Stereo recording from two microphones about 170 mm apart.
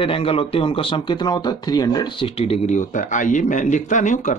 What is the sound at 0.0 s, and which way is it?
Speech, 35° left (ahead or behind).